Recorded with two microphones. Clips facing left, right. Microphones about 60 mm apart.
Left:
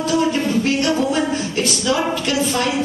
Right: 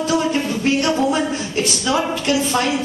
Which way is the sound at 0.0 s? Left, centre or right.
Right.